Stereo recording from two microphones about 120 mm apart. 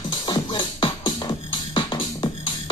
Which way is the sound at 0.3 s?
40° left (ahead or behind).